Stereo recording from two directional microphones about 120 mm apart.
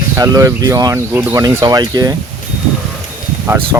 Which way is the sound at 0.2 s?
30° right (ahead or behind).